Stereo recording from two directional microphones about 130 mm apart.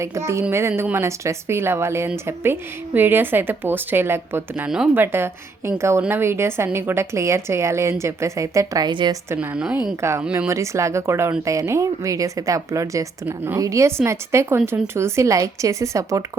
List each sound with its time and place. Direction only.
0.0 s a woman's voice: 20° right (ahead or behind)
9.3 s a woman's voice: 15° right (ahead or behind)
10.0 s a woman's voice: 20° right (ahead or behind)